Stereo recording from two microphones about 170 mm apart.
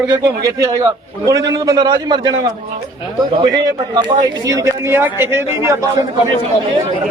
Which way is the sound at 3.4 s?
25° right (ahead or behind).